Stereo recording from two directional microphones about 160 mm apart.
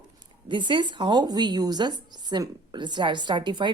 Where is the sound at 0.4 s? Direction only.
30° right (ahead or behind).